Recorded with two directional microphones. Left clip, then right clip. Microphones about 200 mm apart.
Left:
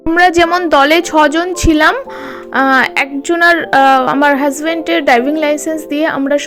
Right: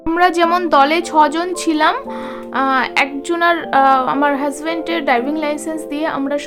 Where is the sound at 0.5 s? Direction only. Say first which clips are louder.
Left 4 dB; 25° left (ahead or behind).